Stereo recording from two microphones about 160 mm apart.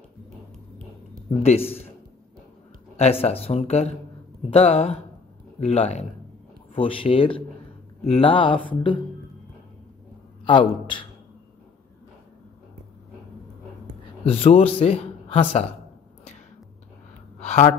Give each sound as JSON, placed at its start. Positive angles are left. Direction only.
{"t": 1.4, "sound": "speech", "side_deg": 40}
{"t": 3.0, "sound": "speech", "side_deg": 40}
{"t": 10.4, "sound": "a man's voice", "side_deg": 30}
{"t": 14.2, "sound": "a man's voice", "side_deg": 35}
{"t": 17.4, "sound": "a sound", "side_deg": 45}